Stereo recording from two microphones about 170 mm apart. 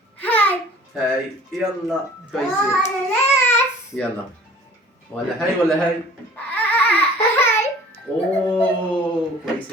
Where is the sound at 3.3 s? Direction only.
15° left (ahead or behind).